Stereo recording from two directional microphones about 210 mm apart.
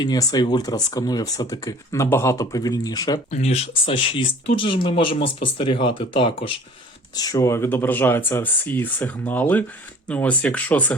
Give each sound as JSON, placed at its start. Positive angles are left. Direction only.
{"t": 0.0, "sound": "speech", "side_deg": 20}
{"t": 3.2, "sound": "speech", "side_deg": 30}